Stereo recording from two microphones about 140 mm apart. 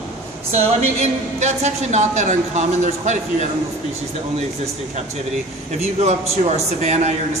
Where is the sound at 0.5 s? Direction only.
55° right (ahead or behind).